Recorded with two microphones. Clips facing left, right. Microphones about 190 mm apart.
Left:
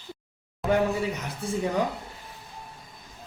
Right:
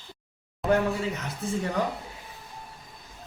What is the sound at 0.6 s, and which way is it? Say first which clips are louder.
Speech: right 1 dB; centre (ahead or behind).